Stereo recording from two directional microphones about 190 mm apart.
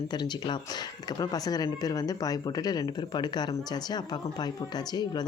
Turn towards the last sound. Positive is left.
turn(degrees=20)  # may be behind; listen again after turning